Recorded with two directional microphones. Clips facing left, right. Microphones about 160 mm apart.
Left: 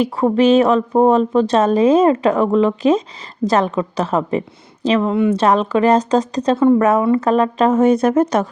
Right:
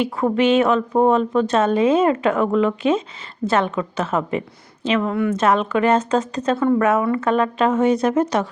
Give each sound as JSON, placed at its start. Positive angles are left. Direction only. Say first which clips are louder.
{"t": 0.0, "sound": "a woman's voice", "louder": "left 4 dB", "side_deg": 35}
{"t": 5.4, "sound": "a woman's voice", "louder": "left 3 dB", "side_deg": 35}